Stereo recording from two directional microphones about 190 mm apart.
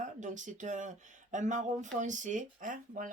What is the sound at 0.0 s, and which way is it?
Speech, 40° right (ahead or behind).